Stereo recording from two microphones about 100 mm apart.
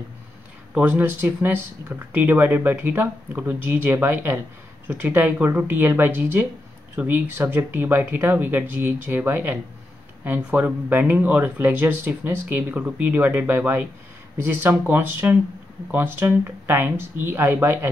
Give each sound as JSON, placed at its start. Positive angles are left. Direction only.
{"t": 0.7, "sound": "speech", "side_deg": -20}